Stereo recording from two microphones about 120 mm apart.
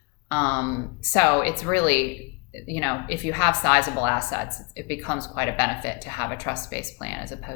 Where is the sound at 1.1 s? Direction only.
25° left (ahead or behind).